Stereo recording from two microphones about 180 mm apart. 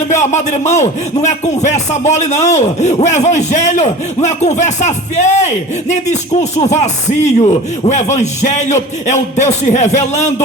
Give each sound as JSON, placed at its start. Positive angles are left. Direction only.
{"t": 0.1, "sound": "speech", "side_deg": 40}